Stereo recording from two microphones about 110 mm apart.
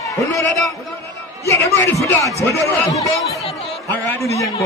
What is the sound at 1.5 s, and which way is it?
A man's voice, 25° left (ahead or behind).